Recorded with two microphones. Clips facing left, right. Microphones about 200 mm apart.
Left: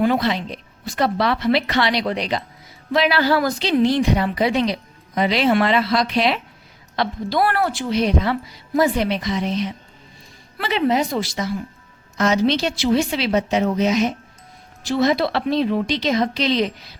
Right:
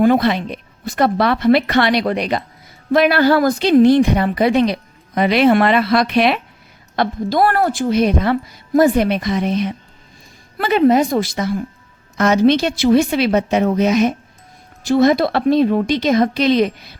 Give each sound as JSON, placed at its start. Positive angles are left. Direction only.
{"t": 0.0, "sound": "a woman's voice", "side_deg": -50}
{"t": 6.9, "sound": "a woman's voice", "side_deg": -50}